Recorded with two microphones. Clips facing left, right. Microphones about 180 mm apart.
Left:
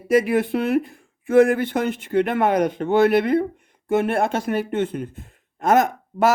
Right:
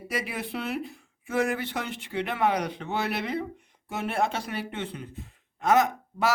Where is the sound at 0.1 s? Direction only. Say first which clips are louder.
Left 15 dB; 50° left (ahead or behind).